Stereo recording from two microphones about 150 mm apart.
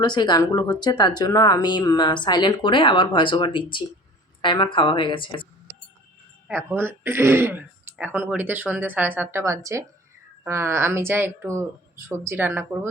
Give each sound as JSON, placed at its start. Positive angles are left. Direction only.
{"t": 0.0, "sound": "speech", "side_deg": 30}
{"t": 6.5, "sound": "speech", "side_deg": -15}